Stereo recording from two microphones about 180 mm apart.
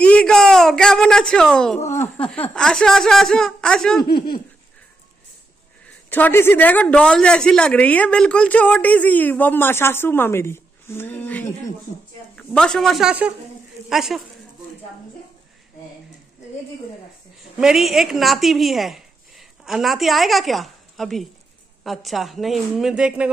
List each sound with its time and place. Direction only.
0.0 s a sound: 5° left (ahead or behind)
2.1 s a woman's voice: 5° left (ahead or behind)
4.0 s speech: 25° left (ahead or behind)
5.9 s a man's voice: 10° left (ahead or behind)
17.6 s a woman's voice: centre (ahead or behind)